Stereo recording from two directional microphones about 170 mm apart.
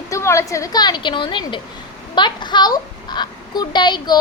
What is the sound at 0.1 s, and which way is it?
Speech, 15° left (ahead or behind).